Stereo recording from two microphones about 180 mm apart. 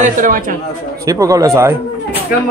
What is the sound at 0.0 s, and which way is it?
Speech, 45° right (ahead or behind).